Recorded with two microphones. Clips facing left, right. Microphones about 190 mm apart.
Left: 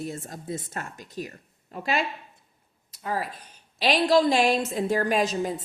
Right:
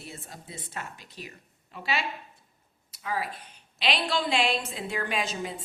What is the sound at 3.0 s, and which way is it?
A woman's voice, 40° left (ahead or behind).